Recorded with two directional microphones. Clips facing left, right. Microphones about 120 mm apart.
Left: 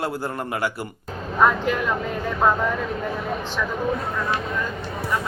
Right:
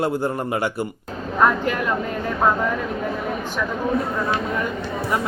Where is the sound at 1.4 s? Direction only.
Centre (ahead or behind).